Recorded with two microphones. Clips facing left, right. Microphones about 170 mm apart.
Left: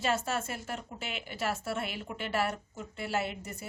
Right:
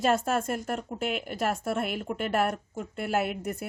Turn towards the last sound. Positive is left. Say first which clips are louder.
# right 6 dB
turn(degrees=-60)  # may be behind; listen again after turning